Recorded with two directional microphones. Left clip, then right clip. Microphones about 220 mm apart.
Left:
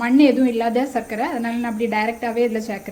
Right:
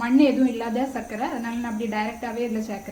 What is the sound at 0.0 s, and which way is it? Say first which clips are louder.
A woman's voice: left 4 dB; 30° left (ahead or behind).